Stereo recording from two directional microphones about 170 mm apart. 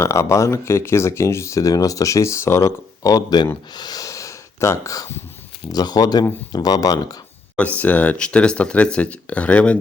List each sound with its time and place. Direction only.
0.0 s speech: 15° left (ahead or behind)
7.8 s speech: 10° left (ahead or behind)